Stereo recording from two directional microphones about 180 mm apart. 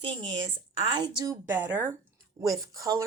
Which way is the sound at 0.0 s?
25° right (ahead or behind).